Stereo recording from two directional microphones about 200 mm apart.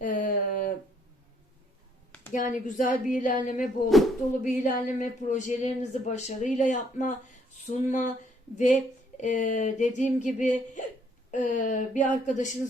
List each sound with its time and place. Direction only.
0.0 s a sound: 40° left (ahead or behind)
2.3 s speech: 40° left (ahead or behind)
3.8 s speech: centre (ahead or behind)
4.4 s speech: 40° left (ahead or behind)